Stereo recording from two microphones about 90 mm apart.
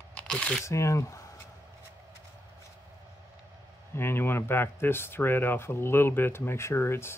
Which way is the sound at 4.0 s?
25° left (ahead or behind).